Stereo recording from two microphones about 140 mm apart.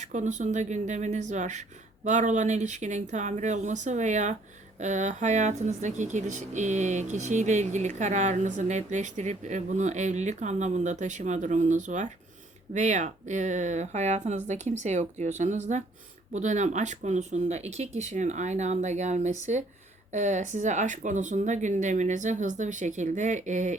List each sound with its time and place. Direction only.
0.0 s speech: 60° right (ahead or behind)